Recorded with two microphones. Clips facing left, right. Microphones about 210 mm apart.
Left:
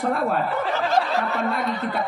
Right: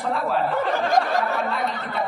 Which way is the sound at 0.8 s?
15° right (ahead or behind).